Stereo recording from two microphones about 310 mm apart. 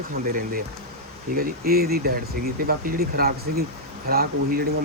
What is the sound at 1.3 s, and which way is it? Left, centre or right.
Speech, right.